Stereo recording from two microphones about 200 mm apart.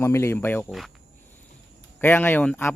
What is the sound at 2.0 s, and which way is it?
Speech, 10° left (ahead or behind).